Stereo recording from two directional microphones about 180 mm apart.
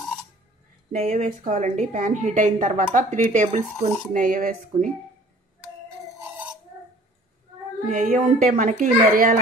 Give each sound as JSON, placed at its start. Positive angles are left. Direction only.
{"t": 0.9, "sound": "a woman's voice", "side_deg": -40}
{"t": 7.9, "sound": "a woman's voice", "side_deg": -45}